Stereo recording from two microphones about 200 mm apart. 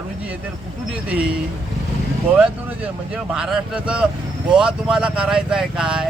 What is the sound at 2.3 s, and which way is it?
A man's voice, 5° right (ahead or behind).